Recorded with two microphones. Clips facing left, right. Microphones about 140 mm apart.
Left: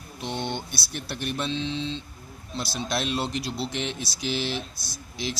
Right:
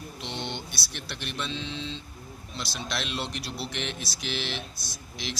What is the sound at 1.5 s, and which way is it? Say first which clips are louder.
Mantra: left 6 dB; centre (ahead or behind).